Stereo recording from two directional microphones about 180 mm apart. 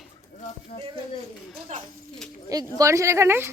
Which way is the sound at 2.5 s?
15° right (ahead or behind).